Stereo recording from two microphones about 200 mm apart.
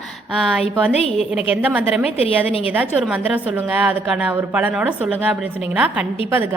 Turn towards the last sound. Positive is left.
turn(degrees=-10)  # may be behind; listen again after turning